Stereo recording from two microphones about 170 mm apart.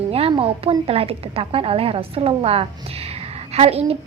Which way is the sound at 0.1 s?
35° right (ahead or behind).